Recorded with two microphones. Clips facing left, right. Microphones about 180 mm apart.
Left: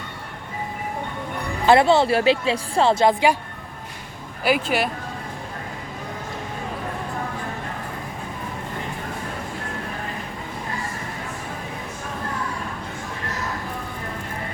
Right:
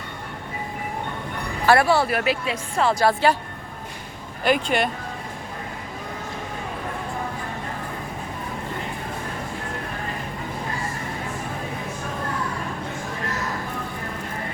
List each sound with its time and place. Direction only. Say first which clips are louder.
1.6 s speech: left 3 dB; 20° left (ahead or behind)
4.4 s speech: even; 5° left (ahead or behind)